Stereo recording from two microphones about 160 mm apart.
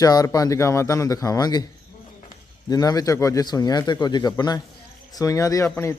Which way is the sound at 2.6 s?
25° left (ahead or behind).